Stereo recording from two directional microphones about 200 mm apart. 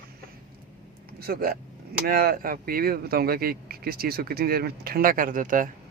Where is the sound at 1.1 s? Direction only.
50° right (ahead or behind).